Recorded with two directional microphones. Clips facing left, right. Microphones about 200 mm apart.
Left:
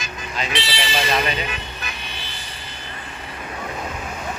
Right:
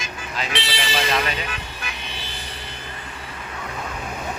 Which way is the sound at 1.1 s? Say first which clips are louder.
Left 2 dB; 15° left (ahead or behind).